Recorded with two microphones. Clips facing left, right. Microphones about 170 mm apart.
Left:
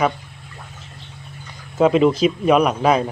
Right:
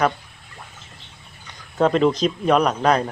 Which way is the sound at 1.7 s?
5° left (ahead or behind).